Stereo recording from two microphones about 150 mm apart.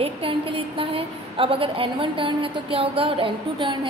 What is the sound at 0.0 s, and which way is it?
A woman's voice, 35° right (ahead or behind).